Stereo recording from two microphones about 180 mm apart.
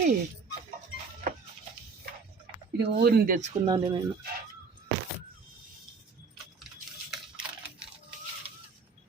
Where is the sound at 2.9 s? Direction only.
60° right (ahead or behind).